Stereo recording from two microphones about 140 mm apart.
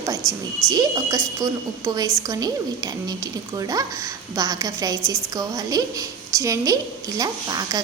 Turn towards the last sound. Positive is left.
turn(degrees=-30)  # may be behind; listen again after turning